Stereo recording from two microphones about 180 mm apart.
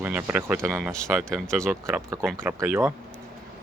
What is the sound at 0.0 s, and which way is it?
Speech, 10° right (ahead or behind).